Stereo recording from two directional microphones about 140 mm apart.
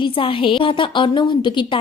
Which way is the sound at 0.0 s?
40° left (ahead or behind).